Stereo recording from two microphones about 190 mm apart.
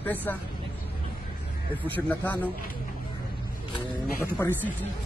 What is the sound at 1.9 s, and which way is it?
Speech, 10° left (ahead or behind).